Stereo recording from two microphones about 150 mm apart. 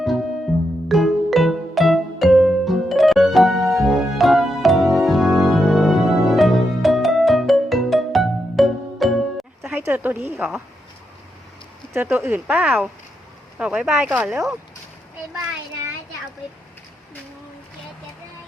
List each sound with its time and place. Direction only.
0.0 s music: centre (ahead or behind)
9.6 s a sound: 10° right (ahead or behind)
12.2 s speech: 10° right (ahead or behind)